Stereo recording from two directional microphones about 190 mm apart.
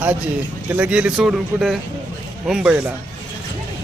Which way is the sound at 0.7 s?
5° right (ahead or behind).